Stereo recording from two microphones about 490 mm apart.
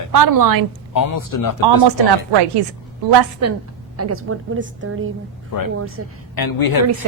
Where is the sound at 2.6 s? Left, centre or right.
Right.